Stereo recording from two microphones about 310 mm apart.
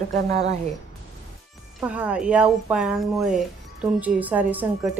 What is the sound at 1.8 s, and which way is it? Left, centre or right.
Speech, centre.